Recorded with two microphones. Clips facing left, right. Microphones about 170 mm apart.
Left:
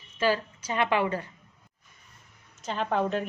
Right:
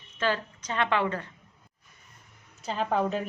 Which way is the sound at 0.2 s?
10° left (ahead or behind).